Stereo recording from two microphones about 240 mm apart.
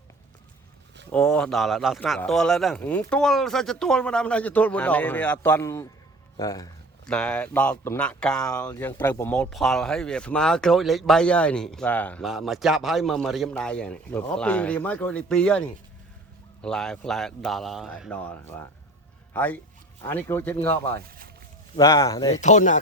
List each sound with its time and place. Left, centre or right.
1.1 s speech: centre
7.0 s speech: centre
19.3 s a man's voice: centre
22.4 s speech: left